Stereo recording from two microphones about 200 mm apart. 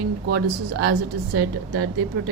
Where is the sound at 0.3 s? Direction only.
55° right (ahead or behind).